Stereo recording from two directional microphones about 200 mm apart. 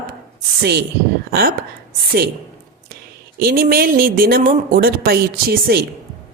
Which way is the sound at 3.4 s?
50° right (ahead or behind).